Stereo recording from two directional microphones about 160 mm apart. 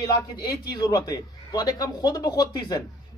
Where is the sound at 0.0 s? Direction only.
20° left (ahead or behind).